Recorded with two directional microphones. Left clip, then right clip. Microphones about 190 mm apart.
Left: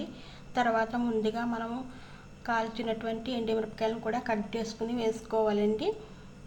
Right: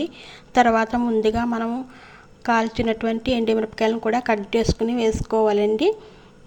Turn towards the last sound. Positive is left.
turn(degrees=-35)  # may be behind; listen again after turning